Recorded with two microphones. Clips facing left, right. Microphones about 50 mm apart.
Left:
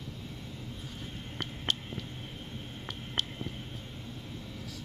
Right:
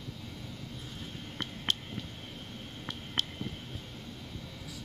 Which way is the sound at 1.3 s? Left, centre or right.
Centre.